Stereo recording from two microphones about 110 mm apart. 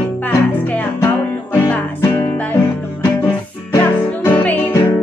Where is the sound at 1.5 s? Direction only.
15° left (ahead or behind).